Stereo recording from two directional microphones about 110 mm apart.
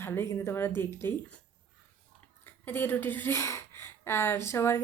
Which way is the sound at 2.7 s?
20° left (ahead or behind).